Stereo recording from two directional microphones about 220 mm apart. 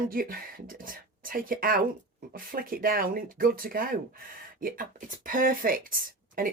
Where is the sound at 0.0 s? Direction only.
40° right (ahead or behind).